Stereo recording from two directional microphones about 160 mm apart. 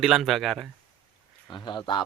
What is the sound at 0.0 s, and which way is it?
Speech, centre (ahead or behind).